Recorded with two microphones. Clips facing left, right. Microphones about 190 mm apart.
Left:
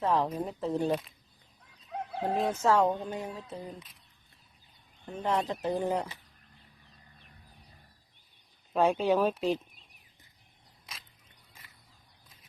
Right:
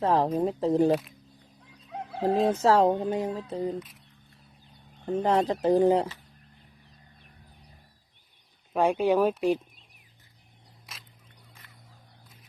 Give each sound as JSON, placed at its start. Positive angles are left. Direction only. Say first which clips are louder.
{"t": 0.0, "sound": "speech", "louder": "right 5 dB", "side_deg": -30}
{"t": 0.9, "sound": "speech", "louder": "right 6 dB", "side_deg": 0}
{"t": 1.9, "sound": "chicken", "louder": "right 5 dB", "side_deg": 0}
{"t": 2.5, "sound": "speech", "louder": "right 3 dB", "side_deg": -35}
{"t": 3.8, "sound": "speech", "louder": "right 13 dB", "side_deg": 0}
{"t": 5.1, "sound": "speech", "louder": "right 6 dB", "side_deg": -35}
{"t": 8.7, "sound": "speech", "louder": "right 2 dB", "side_deg": -10}
{"t": 11.6, "sound": "a sound", "louder": "right 4 dB", "side_deg": 5}